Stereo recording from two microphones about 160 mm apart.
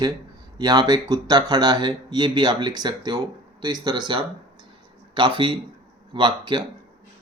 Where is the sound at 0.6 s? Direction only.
25° right (ahead or behind).